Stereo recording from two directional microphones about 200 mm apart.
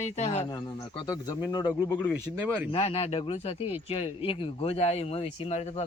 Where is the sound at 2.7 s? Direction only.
30° left (ahead or behind).